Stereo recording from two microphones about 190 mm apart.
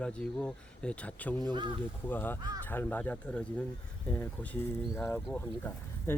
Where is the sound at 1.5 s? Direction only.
25° right (ahead or behind).